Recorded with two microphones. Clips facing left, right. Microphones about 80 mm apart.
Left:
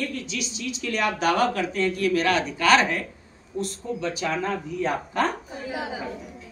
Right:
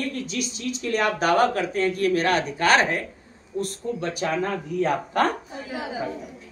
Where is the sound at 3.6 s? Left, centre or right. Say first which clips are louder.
Even; right.